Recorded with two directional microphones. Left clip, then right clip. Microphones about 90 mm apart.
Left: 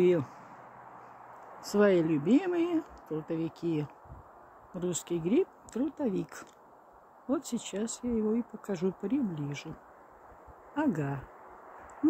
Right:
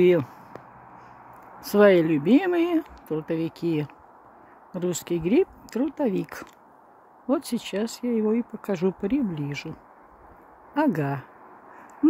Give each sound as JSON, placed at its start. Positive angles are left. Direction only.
{"t": 0.0, "sound": "speech", "side_deg": -55}
{"t": 1.6, "sound": "speech", "side_deg": -60}